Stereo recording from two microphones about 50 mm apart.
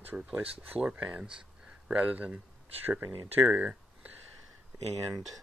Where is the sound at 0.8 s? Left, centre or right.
Right.